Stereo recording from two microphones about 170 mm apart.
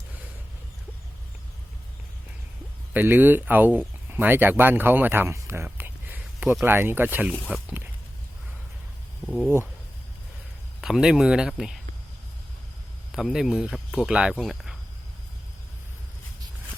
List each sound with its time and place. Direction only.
2.9 s speech: 10° right (ahead or behind)
7.5 s a sound: 10° right (ahead or behind)
9.2 s speech: centre (ahead or behind)
10.8 s speech: 5° right (ahead or behind)
13.1 s speech: 5° right (ahead or behind)